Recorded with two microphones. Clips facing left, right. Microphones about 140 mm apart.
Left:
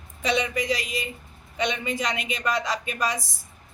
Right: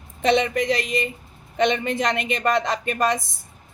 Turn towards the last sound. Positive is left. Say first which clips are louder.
# right 5 dB
turn(degrees=-55)  # may be behind; listen again after turning